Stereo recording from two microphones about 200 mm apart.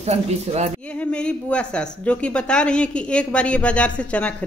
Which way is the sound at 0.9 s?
5° left (ahead or behind).